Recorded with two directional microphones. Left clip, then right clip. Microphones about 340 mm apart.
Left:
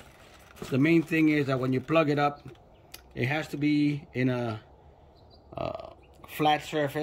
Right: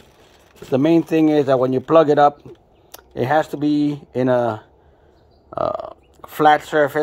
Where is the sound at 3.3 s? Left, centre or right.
Centre.